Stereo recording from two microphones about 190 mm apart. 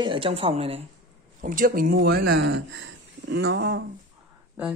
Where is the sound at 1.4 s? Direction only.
50° right (ahead or behind); by 3.8 s 65° right (ahead or behind).